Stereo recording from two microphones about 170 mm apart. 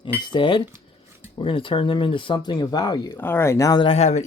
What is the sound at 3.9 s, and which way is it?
Speech, 40° left (ahead or behind).